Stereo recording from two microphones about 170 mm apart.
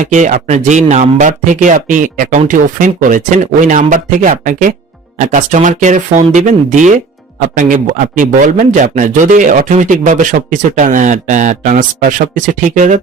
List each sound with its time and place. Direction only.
0.0 s speech: 45° right (ahead or behind)